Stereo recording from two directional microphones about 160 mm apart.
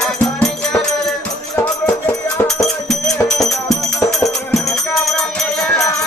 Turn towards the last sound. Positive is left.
turn(degrees=5)  # may be behind; listen again after turning